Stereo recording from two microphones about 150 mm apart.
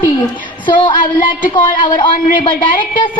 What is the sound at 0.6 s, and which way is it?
A woman's voice, 30° left (ahead or behind).